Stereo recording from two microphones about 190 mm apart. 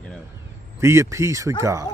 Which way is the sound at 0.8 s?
15° right (ahead or behind).